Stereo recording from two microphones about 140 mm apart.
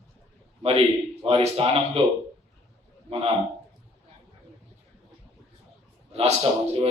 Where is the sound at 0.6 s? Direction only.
45° right (ahead or behind).